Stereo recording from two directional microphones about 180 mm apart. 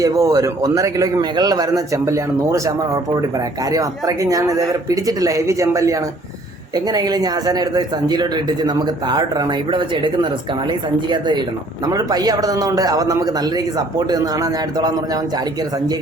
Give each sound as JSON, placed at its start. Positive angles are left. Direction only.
{"t": 0.0, "sound": "a man's voice", "side_deg": -20}